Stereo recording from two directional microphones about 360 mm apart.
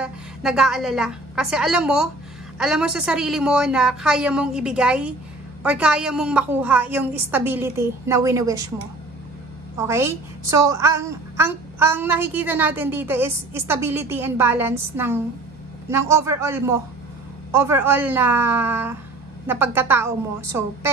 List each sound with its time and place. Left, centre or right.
0.0 s a woman's voice: centre
9.8 s a woman's voice: centre